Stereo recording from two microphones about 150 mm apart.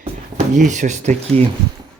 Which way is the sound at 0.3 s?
55° right (ahead or behind).